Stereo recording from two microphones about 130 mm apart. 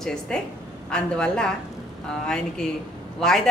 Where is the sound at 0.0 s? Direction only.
5° left (ahead or behind).